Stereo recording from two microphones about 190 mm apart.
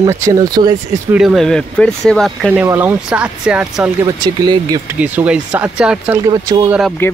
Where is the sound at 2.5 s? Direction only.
10° right (ahead or behind).